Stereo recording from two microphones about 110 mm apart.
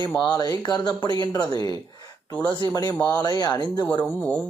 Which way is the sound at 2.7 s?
35° left (ahead or behind).